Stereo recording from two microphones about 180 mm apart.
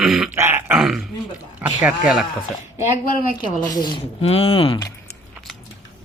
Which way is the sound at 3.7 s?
25° left (ahead or behind).